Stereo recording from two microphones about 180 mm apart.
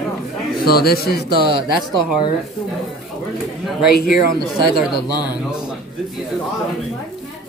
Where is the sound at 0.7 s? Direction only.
60° left (ahead or behind).